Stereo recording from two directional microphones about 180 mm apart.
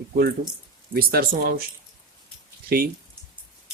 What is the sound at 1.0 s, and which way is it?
Speech, 55° right (ahead or behind).